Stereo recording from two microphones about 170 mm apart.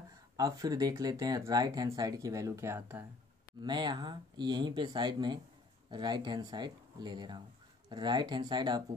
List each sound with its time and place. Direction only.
0.4 s speech: 20° right (ahead or behind)
3.6 s speech: 25° right (ahead or behind)